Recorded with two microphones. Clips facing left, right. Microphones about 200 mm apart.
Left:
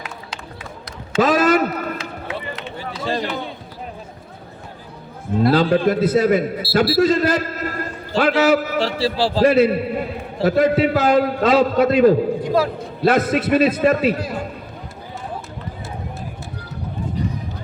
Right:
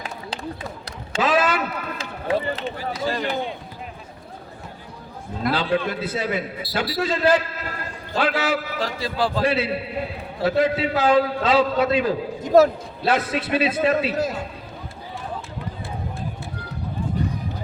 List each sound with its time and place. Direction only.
1.2 s a sound: 40° left (ahead or behind)
2.0 s run: 30° right (ahead or behind)
2.7 s a man's voice: 30° left (ahead or behind)
5.4 s a man's voice: 40° left (ahead or behind)
8.8 s a man's voice: 30° left (ahead or behind)
9.4 s a man's voice: 45° left (ahead or behind)
12.5 s a man's voice: 45° right (ahead or behind)
13.1 s a man's voice: 45° left (ahead or behind)